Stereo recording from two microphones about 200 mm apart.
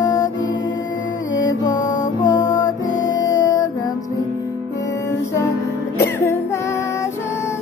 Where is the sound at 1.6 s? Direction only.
20° left (ahead or behind).